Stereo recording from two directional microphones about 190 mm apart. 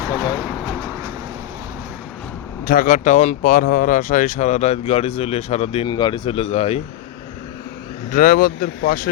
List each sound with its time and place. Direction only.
2.6 s speech: 45° left (ahead or behind)
8.1 s speech: 50° left (ahead or behind)